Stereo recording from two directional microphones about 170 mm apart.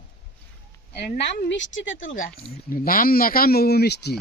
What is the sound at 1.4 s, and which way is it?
Speech, 90° left.